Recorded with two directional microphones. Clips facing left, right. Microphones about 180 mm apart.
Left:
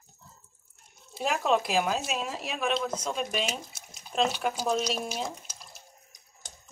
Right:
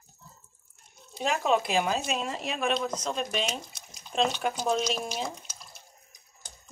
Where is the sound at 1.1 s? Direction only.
5° left (ahead or behind).